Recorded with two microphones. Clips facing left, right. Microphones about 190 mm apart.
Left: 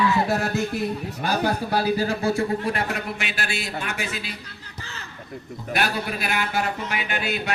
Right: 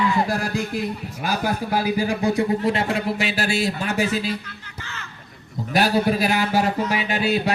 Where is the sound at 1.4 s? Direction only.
10° right (ahead or behind); by 4.3 s 40° right (ahead or behind).